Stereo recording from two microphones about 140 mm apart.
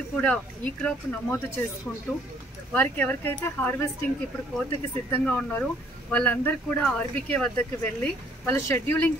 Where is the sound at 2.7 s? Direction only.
10° left (ahead or behind).